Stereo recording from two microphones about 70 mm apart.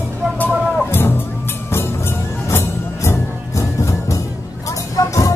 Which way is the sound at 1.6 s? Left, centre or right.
Left.